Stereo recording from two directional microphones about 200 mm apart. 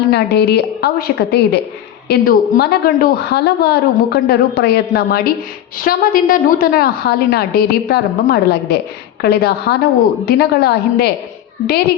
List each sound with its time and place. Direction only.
0.1 s a woman's voice: 55° left (ahead or behind)